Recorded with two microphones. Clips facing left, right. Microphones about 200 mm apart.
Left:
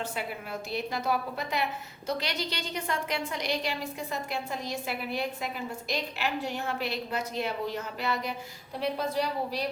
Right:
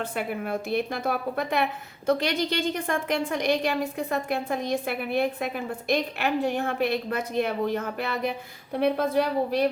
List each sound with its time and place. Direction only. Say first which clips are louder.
0.0 s a woman's voice: right 6 dB; 55° right (ahead or behind)